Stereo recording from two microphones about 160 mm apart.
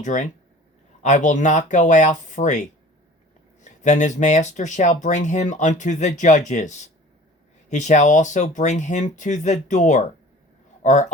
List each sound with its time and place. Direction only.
0.0 s speech: 50° left (ahead or behind)